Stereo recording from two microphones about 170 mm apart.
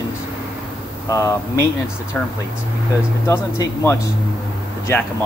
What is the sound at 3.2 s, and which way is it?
Speech, 15° left (ahead or behind).